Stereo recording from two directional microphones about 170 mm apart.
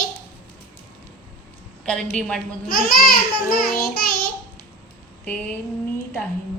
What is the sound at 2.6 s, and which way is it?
Speech, 60° left (ahead or behind).